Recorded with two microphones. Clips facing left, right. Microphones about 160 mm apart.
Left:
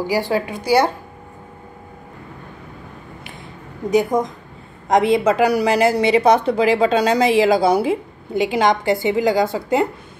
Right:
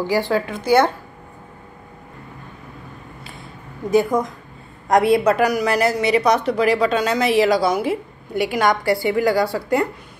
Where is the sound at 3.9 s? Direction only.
20° left (ahead or behind).